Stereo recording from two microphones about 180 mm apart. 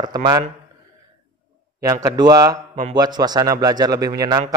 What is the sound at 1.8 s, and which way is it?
A man's voice, 20° right (ahead or behind).